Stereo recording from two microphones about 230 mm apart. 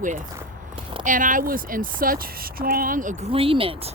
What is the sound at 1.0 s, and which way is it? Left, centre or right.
Speech, right.